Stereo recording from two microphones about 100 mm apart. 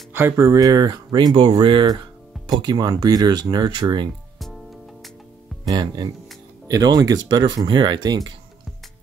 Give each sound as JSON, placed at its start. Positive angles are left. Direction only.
{"t": 0.1, "sound": "speech", "side_deg": -25}
{"t": 5.7, "sound": "speech", "side_deg": -45}